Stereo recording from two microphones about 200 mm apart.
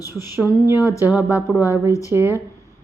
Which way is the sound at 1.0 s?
10° right (ahead or behind).